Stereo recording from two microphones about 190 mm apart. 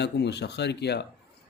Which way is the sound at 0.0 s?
65° left (ahead or behind).